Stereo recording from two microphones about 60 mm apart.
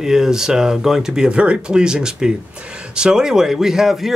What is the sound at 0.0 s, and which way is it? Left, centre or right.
Speech, centre.